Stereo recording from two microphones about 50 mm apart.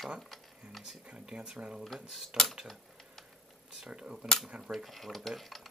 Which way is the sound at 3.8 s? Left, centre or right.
Centre.